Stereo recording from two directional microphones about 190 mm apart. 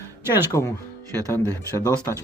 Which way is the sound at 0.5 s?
20° left (ahead or behind).